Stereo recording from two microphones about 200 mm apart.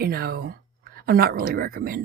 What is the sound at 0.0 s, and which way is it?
Speech, 50° right (ahead or behind).